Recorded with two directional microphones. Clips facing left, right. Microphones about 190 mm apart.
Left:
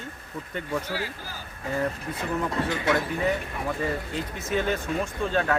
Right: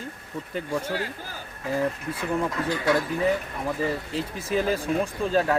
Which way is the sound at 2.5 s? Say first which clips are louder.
Right 1 dB; 20° left (ahead or behind).